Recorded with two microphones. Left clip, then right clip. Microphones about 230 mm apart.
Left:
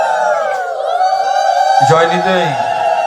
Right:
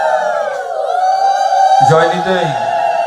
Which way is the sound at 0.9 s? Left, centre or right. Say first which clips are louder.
Even; left.